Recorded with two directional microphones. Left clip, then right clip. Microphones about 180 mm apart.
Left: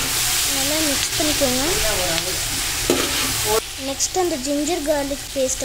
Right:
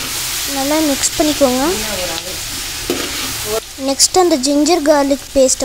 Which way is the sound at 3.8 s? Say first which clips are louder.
Right 9 dB; 40° right (ahead or behind).